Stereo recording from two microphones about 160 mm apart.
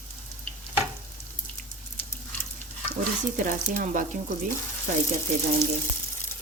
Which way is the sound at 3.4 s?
55° right (ahead or behind).